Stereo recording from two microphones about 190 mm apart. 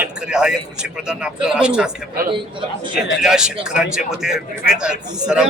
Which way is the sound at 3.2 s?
5° right (ahead or behind).